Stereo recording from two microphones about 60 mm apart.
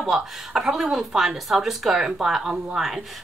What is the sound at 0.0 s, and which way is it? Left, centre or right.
A woman's voice, centre.